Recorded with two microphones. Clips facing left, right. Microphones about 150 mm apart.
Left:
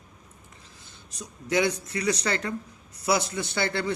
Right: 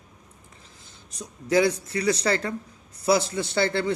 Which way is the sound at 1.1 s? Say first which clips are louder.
Right 4 dB; 30° right (ahead or behind).